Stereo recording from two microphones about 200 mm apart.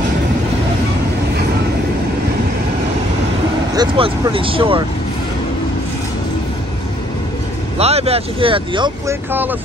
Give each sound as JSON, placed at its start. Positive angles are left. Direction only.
{"t": 3.7, "sound": "speech", "side_deg": -20}
{"t": 7.8, "sound": "speech", "side_deg": -30}
{"t": 9.3, "sound": "speech", "side_deg": -10}